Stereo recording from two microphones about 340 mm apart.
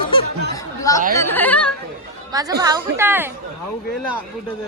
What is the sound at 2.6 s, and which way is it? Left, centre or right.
Speech, centre.